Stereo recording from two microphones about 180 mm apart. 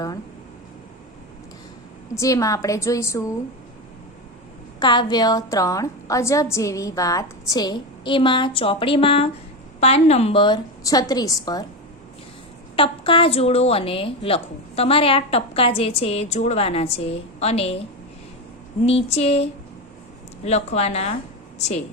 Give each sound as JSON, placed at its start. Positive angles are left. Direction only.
{"t": 2.1, "sound": "a woman's voice", "side_deg": 20}
{"t": 4.8, "sound": "a woman's voice", "side_deg": 25}
{"t": 12.7, "sound": "a woman's voice", "side_deg": 30}
{"t": 18.9, "sound": "a woman's voice", "side_deg": 35}